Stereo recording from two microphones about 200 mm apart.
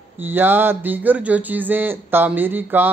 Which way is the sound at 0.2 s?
10° right (ahead or behind).